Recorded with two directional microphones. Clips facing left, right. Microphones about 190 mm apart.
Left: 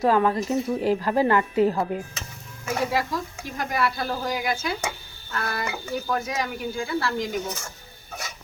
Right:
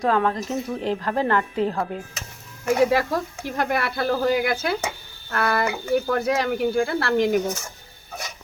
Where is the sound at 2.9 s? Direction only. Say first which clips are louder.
Right 4 dB; 65° right (ahead or behind).